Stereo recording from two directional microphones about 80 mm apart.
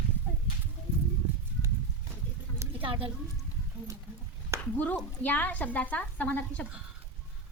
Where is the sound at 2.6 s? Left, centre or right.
Right.